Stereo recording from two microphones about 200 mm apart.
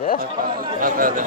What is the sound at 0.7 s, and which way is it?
Speech, 45° right (ahead or behind).